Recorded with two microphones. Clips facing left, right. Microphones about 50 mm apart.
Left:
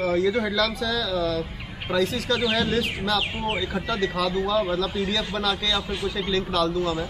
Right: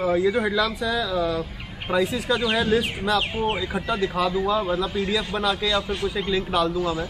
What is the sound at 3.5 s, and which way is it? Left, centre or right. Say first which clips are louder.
Speech: right 1 dB; centre.